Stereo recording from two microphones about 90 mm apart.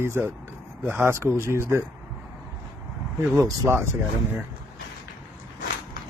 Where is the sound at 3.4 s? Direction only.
30° right (ahead or behind).